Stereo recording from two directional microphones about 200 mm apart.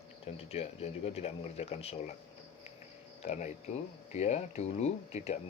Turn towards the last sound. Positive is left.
turn(degrees=35)  # may be behind; listen again after turning